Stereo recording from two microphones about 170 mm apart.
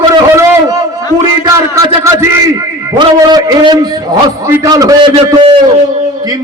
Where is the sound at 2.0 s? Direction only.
15° right (ahead or behind).